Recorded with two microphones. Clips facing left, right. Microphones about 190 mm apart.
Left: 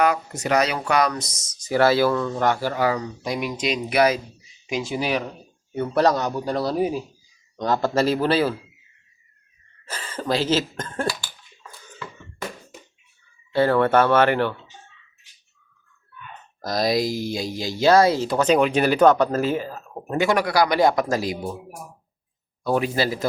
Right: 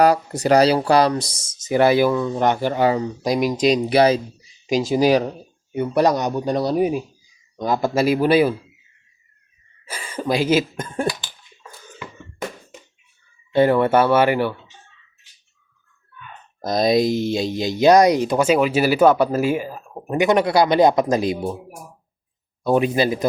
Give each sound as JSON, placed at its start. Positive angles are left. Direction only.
{"t": 0.0, "sound": "speech", "side_deg": -35}
{"t": 3.2, "sound": "speech", "side_deg": -40}
{"t": 5.7, "sound": "speech", "side_deg": -15}
{"t": 9.8, "sound": "speech", "side_deg": -10}
{"t": 13.5, "sound": "speech", "side_deg": -15}
{"t": 16.6, "sound": "speech", "side_deg": -20}
{"t": 22.6, "sound": "speech", "side_deg": -20}